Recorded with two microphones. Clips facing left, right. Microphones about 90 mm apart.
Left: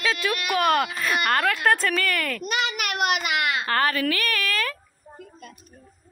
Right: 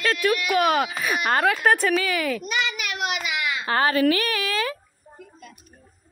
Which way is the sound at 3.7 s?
25° right (ahead or behind).